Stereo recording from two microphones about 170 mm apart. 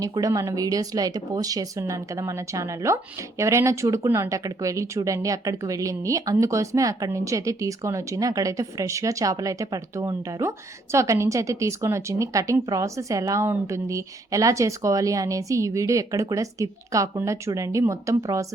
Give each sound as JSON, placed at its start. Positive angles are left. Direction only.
{"t": 0.0, "sound": "speech", "side_deg": -20}